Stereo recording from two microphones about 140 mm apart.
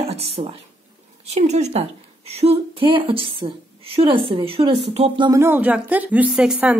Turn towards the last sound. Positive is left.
turn(degrees=-5)  # may be behind; listen again after turning